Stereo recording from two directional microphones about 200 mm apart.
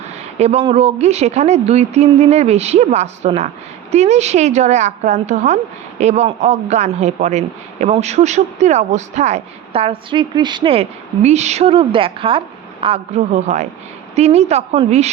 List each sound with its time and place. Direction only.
0.3 s a man's voice: 30° right (ahead or behind)